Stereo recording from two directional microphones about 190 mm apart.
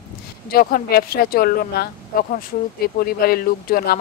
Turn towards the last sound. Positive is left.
turn(degrees=55)  # may be behind; listen again after turning